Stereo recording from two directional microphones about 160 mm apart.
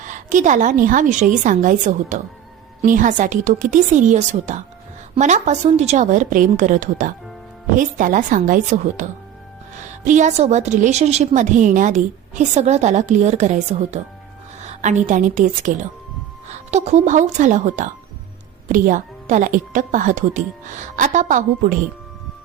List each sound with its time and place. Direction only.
0.1 s a woman's voice: 50° right (ahead or behind)